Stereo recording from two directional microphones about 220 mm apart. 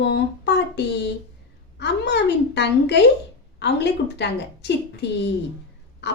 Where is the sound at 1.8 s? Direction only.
50° left (ahead or behind).